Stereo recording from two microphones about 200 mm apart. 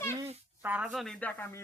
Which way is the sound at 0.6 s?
5° right (ahead or behind).